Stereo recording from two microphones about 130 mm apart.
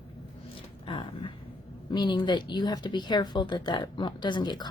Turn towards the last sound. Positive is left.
turn(degrees=35)  # may be behind; listen again after turning